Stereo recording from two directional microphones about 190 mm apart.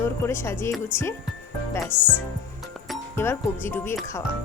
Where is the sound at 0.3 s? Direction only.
15° left (ahead or behind).